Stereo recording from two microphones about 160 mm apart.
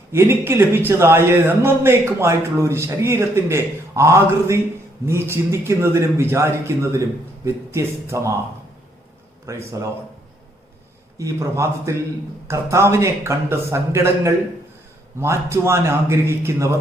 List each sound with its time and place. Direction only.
0.1 s speech: 15° right (ahead or behind)
9.5 s a man's voice: 20° right (ahead or behind)
11.2 s speech: 20° right (ahead or behind)